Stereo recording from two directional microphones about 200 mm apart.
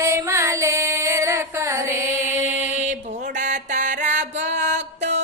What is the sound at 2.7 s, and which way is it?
Mantra, 35° right (ahead or behind).